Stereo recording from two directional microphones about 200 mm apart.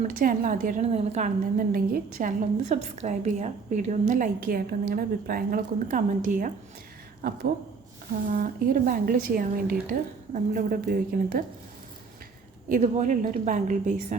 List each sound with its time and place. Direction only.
0.0 s a woman's voice: 45° right (ahead or behind)
12.6 s a woman's voice: 40° right (ahead or behind)